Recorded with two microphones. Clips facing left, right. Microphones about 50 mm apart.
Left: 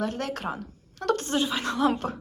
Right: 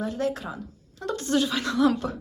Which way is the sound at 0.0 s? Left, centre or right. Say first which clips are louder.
Right 1 dB; left.